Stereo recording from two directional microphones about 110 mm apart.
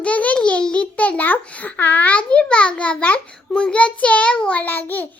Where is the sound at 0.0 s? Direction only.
15° left (ahead or behind).